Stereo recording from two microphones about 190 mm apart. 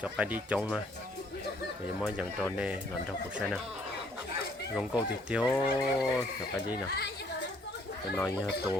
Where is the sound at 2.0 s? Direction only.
5° right (ahead or behind).